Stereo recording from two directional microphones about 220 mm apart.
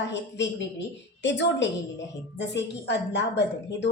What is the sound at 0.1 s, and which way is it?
A man's voice, 55° left (ahead or behind).